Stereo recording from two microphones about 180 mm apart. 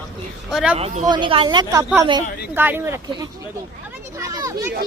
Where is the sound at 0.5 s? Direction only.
5° right (ahead or behind).